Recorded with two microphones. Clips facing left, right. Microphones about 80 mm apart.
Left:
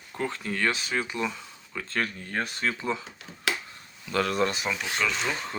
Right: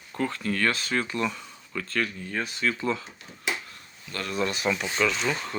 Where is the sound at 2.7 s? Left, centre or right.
Left.